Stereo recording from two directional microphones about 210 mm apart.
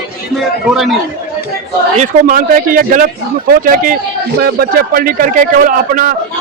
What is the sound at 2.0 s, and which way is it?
A man's voice, 40° right (ahead or behind).